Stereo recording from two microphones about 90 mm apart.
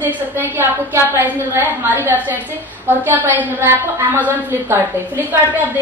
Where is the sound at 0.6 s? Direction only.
25° right (ahead or behind).